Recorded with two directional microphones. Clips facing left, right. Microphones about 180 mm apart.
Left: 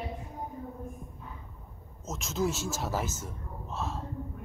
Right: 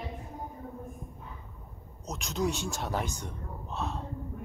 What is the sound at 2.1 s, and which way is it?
A man's voice, centre (ahead or behind).